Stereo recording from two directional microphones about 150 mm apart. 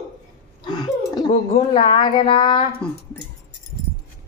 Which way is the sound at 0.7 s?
25° left (ahead or behind).